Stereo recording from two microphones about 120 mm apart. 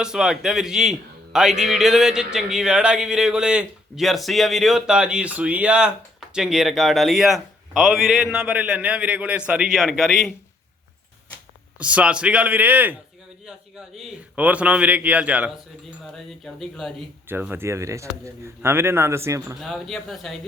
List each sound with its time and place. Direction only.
0.0 s a man's voice: 5° right (ahead or behind)
11.8 s a man's voice: 10° right (ahead or behind)
16.0 s a man's voice: 5° left (ahead or behind)
17.2 s a man's voice: 15° right (ahead or behind)
19.5 s a man's voice: centre (ahead or behind)